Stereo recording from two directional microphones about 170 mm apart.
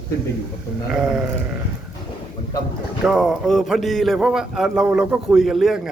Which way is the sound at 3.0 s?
Centre (ahead or behind).